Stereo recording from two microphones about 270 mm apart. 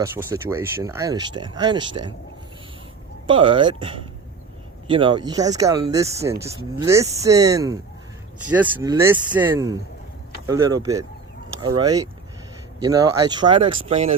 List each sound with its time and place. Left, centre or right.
0.0 s speech: centre
3.2 s speech: centre